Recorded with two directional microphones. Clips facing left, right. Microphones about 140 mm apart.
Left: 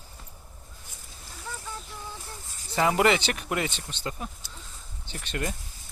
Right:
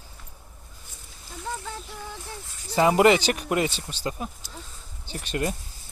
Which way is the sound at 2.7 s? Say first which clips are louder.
Right 4 dB; 25° right (ahead or behind).